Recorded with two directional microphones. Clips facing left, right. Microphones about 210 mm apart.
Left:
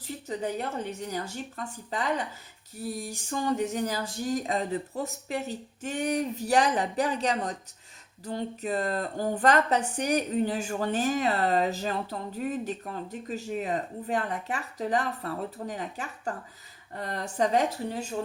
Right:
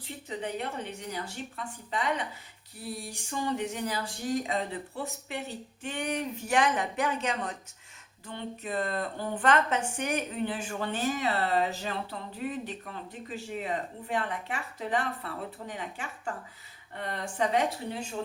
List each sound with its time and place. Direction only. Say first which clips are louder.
0.3 s speech: left 3 dB; 40° left (ahead or behind)